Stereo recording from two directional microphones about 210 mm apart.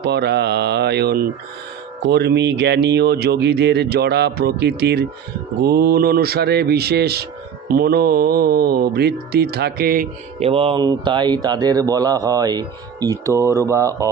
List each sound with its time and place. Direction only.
0.0 s speech: 50° right (ahead or behind)
10.4 s speech: 25° right (ahead or behind)